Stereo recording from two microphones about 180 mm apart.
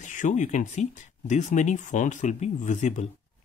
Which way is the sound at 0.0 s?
45° left (ahead or behind).